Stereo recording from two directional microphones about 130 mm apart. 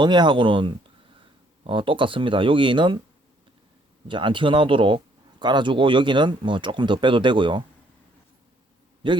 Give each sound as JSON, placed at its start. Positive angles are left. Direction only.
{"t": 0.0, "sound": "speech", "side_deg": -35}
{"t": 4.1, "sound": "speech", "side_deg": -40}